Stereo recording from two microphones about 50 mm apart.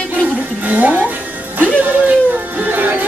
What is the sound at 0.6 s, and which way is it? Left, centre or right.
Music, right.